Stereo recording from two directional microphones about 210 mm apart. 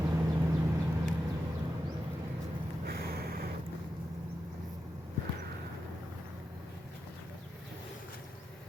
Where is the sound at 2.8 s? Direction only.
45° right (ahead or behind).